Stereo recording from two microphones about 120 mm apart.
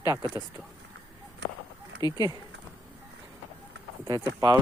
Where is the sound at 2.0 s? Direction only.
35° left (ahead or behind).